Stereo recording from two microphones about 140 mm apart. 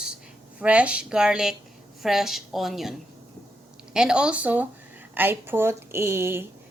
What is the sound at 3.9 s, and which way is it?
Speech, 5° right (ahead or behind).